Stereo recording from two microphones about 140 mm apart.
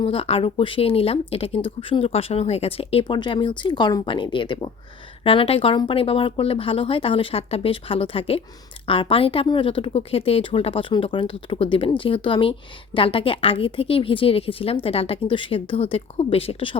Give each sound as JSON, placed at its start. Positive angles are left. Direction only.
{"t": 0.0, "sound": "a woman's voice", "side_deg": 40}